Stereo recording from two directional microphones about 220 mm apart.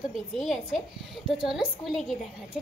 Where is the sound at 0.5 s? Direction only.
Centre (ahead or behind).